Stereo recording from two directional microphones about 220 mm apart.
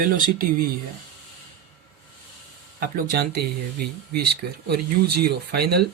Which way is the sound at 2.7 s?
40° right (ahead or behind).